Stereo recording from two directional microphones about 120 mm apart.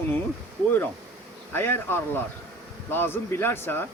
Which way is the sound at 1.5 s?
20° left (ahead or behind).